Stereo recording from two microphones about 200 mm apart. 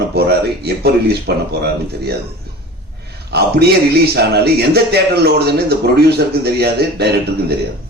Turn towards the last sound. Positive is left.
turn(degrees=-55)  # may be behind; listen again after turning